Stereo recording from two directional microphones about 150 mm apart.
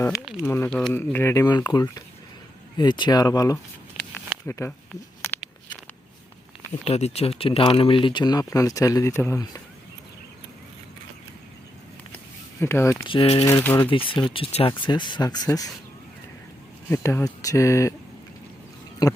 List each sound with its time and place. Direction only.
0.4 s speech: 15° left (ahead or behind)
4.4 s a sound: 15° left (ahead or behind)
6.8 s speech: 45° left (ahead or behind); by 9.6 s 20° left (ahead or behind)
12.5 s speech: 15° left (ahead or behind)
13.1 s speech: 35° left (ahead or behind)
13.4 s speech: 15° left (ahead or behind)
14.1 s speech: 35° left (ahead or behind)
16.9 s speech: 20° left (ahead or behind)
19.0 s speech: 25° left (ahead or behind)